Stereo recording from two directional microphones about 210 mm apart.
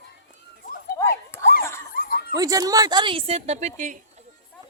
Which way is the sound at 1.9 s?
40° left (ahead or behind).